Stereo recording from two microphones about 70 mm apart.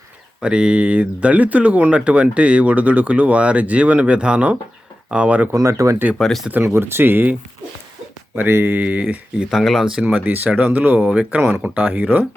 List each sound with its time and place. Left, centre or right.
0.4 s speech: centre
5.6 s speech: right
6.1 s speech: centre
6.7 s speech: right
8.4 s speech: right
9.5 s speech: centre
9.8 s speech: centre
10.2 s speech: right